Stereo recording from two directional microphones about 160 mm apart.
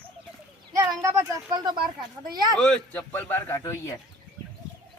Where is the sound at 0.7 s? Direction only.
25° right (ahead or behind).